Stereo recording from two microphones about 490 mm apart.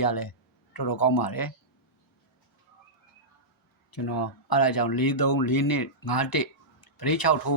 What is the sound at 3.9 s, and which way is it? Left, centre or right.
Speech, left.